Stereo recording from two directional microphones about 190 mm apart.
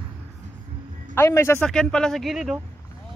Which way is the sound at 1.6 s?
5° left (ahead or behind).